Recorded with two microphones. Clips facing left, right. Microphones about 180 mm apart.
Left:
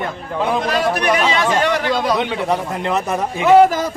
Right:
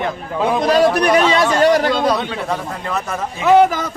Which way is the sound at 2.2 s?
20° left (ahead or behind).